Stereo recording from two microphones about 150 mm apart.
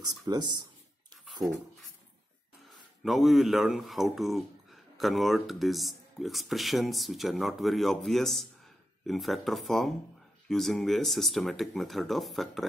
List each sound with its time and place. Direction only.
0.0 s speech: 25° right (ahead or behind)
1.4 s speech: centre (ahead or behind)
2.7 s speech: centre (ahead or behind)